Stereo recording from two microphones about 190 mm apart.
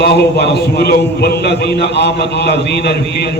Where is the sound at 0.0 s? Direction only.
60° left (ahead or behind).